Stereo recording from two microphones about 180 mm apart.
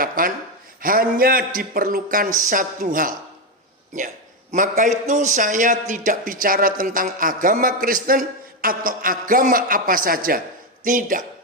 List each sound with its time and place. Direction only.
0.0 s a sound: 50° right (ahead or behind)
0.8 s a man's voice: 55° right (ahead or behind)
4.5 s a man's voice: 45° right (ahead or behind)